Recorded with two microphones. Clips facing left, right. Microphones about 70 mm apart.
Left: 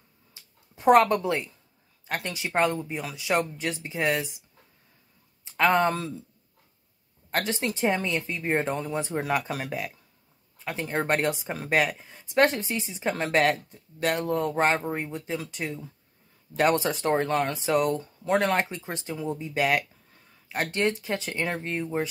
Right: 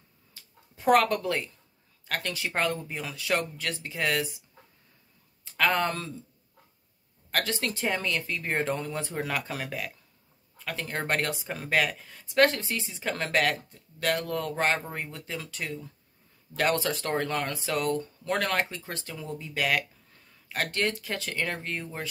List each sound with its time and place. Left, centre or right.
0.3 s a sound: left
2.0 s speech: centre
7.2 s speech: left